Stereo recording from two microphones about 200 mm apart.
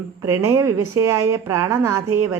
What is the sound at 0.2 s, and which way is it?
A woman's voice, 15° right (ahead or behind).